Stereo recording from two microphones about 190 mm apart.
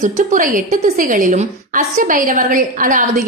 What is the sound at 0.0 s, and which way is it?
A woman's voice, 45° right (ahead or behind).